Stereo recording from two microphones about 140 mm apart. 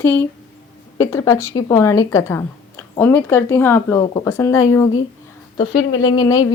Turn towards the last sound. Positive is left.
turn(degrees=25)  # may be behind; listen again after turning